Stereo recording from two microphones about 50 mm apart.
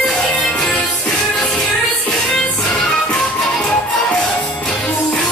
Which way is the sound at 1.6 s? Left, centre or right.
Left.